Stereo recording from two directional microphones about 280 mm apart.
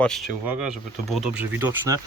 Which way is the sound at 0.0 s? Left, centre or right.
Centre.